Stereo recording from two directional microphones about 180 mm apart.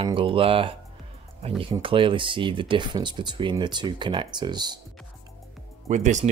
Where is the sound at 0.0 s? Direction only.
30° right (ahead or behind).